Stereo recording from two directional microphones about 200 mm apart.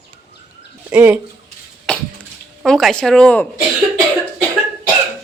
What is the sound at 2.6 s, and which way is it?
Speech, centre (ahead or behind).